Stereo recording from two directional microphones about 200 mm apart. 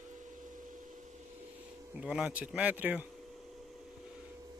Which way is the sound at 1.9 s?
5° right (ahead or behind).